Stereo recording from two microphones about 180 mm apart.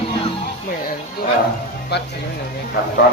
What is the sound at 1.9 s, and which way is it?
Speech, 65° left (ahead or behind).